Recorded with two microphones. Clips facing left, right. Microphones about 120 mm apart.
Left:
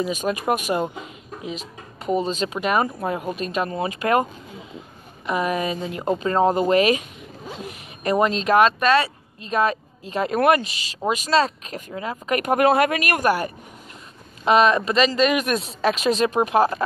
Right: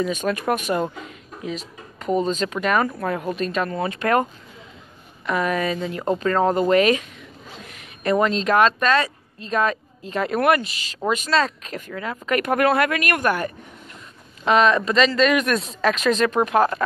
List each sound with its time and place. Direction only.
0.0 s speech: 15° left (ahead or behind)
7.6 s zipper: 20° left (ahead or behind)
8.5 s speech: 15° left (ahead or behind)